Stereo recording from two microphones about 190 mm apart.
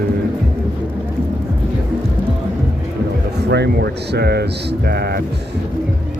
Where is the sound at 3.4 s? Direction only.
60° right (ahead or behind).